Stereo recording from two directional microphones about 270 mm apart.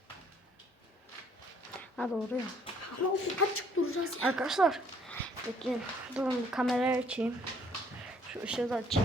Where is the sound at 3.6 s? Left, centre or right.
Left.